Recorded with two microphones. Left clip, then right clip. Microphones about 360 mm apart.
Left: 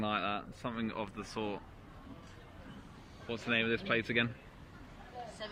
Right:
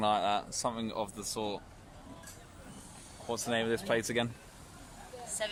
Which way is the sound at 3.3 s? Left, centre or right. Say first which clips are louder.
Right 1 dB; centre.